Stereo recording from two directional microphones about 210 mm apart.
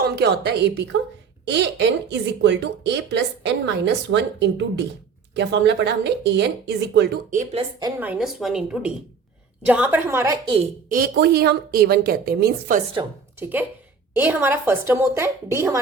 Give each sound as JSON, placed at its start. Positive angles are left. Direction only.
{"t": 0.0, "sound": "a woman's voice", "side_deg": -50}
{"t": 7.3, "sound": "speech", "side_deg": -35}
{"t": 7.8, "sound": "a woman's voice", "side_deg": -20}
{"t": 8.0, "sound": "a woman's voice", "side_deg": -5}
{"t": 10.8, "sound": "a woman's voice", "side_deg": -45}
{"t": 14.2, "sound": "a woman's voice", "side_deg": -10}